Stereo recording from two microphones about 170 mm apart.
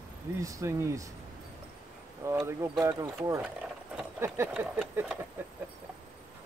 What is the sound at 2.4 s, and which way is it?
Speech, 15° right (ahead or behind).